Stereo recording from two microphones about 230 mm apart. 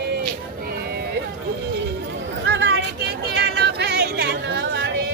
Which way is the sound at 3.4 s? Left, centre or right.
Right.